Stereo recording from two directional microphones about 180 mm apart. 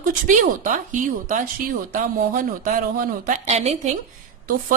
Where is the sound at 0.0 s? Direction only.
45° right (ahead or behind).